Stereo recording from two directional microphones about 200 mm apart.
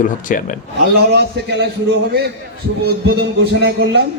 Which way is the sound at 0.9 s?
60° right (ahead or behind).